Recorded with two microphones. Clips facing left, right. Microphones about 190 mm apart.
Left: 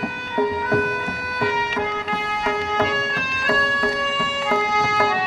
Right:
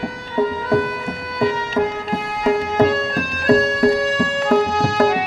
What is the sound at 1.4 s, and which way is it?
Music, 30° right (ahead or behind).